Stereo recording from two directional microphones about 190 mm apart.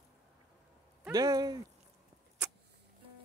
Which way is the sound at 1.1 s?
20° right (ahead or behind).